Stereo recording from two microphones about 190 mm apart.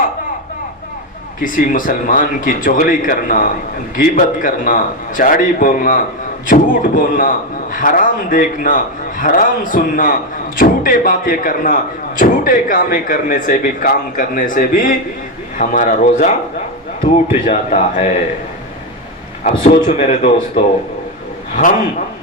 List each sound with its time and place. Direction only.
1.4 s a man's voice: 45° left (ahead or behind)
19.9 s a man's voice: 35° left (ahead or behind)